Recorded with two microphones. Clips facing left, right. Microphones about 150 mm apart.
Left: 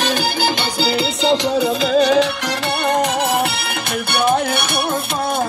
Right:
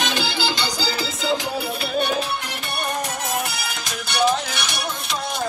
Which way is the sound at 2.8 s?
70° left (ahead or behind).